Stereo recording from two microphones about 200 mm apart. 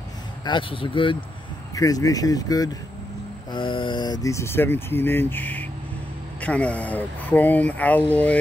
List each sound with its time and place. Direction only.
0.5 s speech: 25° left (ahead or behind); by 8.4 s 5° left (ahead or behind)